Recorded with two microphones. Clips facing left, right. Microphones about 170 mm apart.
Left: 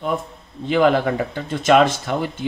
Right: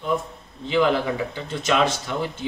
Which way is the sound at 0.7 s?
55° left (ahead or behind).